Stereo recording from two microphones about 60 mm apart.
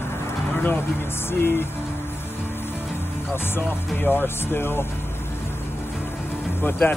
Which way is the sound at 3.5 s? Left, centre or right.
Left.